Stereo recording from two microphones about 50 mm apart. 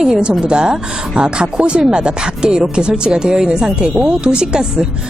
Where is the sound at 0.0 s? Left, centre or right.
Centre.